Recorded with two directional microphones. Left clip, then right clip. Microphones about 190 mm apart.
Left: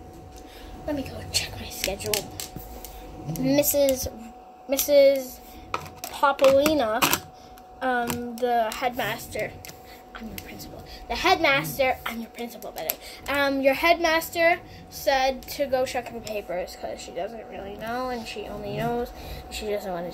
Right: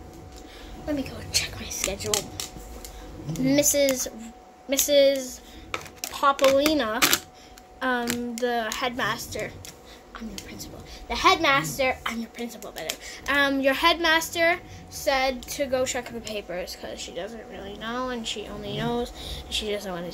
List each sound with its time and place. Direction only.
0.8 s a woman's voice: centre (ahead or behind)
3.4 s a woman's voice: 15° right (ahead or behind)
10.5 s a woman's voice: 5° right (ahead or behind)
15.0 s a woman's voice: centre (ahead or behind)